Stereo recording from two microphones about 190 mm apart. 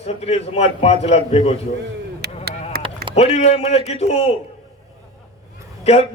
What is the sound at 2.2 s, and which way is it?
Honk, 60° right (ahead or behind).